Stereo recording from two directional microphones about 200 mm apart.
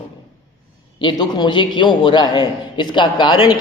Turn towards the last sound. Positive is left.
turn(degrees=20)  # may be behind; listen again after turning